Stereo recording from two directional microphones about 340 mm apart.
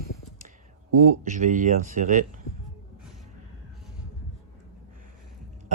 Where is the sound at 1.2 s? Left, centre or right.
Right.